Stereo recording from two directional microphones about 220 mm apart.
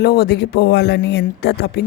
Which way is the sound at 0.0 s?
45° left (ahead or behind).